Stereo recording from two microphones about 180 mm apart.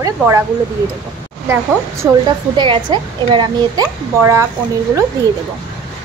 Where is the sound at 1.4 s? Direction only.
15° right (ahead or behind).